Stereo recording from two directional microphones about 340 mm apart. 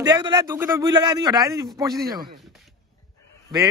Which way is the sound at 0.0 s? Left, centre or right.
Centre.